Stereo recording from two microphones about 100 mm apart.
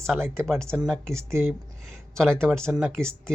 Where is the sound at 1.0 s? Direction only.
30° right (ahead or behind).